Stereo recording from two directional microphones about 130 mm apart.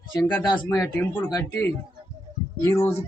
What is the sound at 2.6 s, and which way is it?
Speech, 20° left (ahead or behind).